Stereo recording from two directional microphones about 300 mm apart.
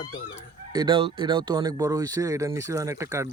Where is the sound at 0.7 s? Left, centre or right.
Centre.